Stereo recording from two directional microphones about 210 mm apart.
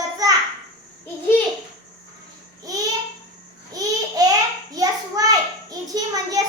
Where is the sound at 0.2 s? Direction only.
15° right (ahead or behind).